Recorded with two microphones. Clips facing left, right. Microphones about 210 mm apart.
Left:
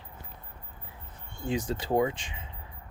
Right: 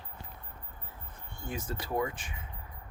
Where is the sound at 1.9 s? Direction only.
20° left (ahead or behind).